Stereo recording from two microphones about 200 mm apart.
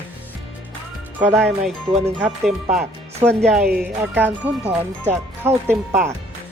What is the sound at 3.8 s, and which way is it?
Speech, 10° right (ahead or behind).